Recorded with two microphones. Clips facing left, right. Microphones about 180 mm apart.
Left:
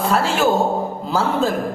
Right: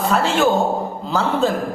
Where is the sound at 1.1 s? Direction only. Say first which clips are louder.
Right 1 dB; 5° left (ahead or behind).